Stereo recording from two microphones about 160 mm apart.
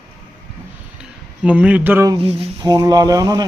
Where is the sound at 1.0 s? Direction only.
10° right (ahead or behind).